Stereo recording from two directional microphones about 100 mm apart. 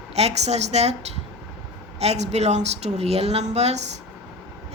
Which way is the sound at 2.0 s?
90° right.